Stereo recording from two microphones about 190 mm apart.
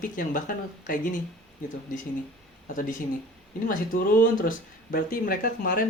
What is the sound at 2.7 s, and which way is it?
Speech, 45° left (ahead or behind).